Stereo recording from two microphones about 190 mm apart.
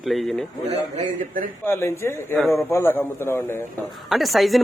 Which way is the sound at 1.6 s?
10° left (ahead or behind).